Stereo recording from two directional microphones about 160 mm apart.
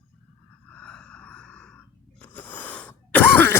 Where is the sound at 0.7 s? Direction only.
5° left (ahead or behind).